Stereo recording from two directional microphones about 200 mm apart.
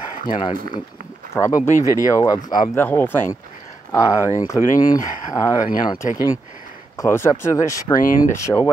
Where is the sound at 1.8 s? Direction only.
15° right (ahead or behind).